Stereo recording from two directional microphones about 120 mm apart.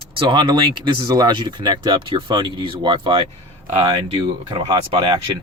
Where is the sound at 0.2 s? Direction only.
45° right (ahead or behind).